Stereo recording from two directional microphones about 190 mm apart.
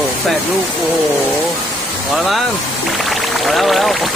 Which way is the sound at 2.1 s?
Centre (ahead or behind).